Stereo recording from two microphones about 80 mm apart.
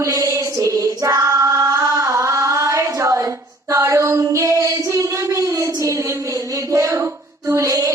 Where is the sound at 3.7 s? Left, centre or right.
Right.